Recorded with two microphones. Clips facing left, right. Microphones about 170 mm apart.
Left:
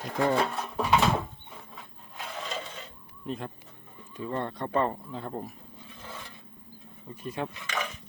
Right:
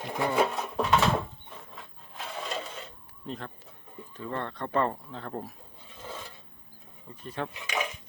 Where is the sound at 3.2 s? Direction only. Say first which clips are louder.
Left 3 dB; 15° left (ahead or behind).